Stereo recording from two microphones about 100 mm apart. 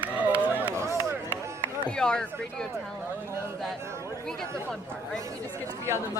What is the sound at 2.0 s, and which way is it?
Speech, 10° left (ahead or behind).